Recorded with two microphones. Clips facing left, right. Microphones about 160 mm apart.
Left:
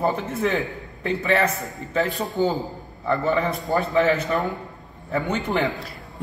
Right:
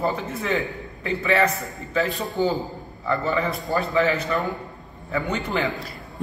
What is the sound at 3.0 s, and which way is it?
A man's voice, 20° left (ahead or behind).